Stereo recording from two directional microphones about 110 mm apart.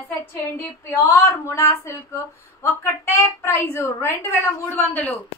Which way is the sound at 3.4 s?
20° left (ahead or behind).